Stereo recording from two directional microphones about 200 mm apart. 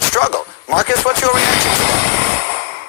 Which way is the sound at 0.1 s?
55° left (ahead or behind).